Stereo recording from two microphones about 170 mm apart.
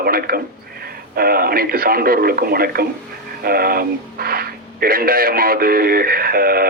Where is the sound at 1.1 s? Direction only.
60° right (ahead or behind).